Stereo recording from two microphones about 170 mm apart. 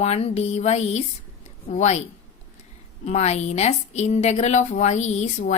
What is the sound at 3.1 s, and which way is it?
A woman's voice, 40° left (ahead or behind).